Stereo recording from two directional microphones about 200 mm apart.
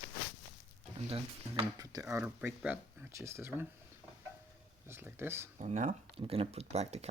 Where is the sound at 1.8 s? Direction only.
15° right (ahead or behind).